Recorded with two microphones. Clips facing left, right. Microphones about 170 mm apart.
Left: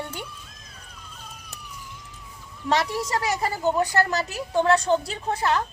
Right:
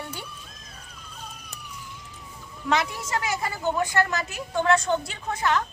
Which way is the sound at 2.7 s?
35° left (ahead or behind).